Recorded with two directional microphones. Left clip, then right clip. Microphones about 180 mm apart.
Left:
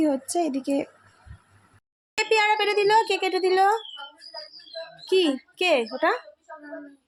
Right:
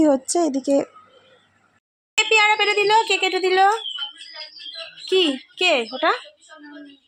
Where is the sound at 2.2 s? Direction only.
10° left (ahead or behind).